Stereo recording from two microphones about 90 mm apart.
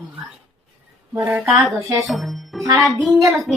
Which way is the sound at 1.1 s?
20° right (ahead or behind).